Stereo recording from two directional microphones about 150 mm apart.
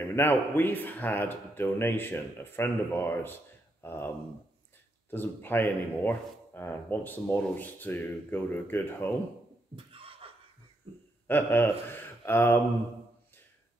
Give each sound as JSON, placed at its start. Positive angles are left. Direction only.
{"t": 0.0, "sound": "a man's voice", "side_deg": 15}
{"t": 5.1, "sound": "a man's voice", "side_deg": 15}
{"t": 9.9, "sound": "a sound", "side_deg": -40}
{"t": 11.2, "sound": "a man's voice", "side_deg": 15}